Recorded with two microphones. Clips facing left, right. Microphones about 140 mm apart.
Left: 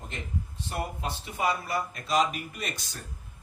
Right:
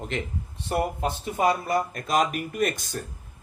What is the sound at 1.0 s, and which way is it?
Speech, 45° right (ahead or behind).